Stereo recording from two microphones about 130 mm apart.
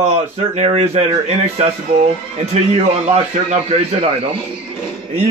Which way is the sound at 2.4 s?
55° right (ahead or behind).